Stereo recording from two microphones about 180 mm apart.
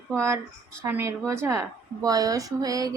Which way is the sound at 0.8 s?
15° right (ahead or behind).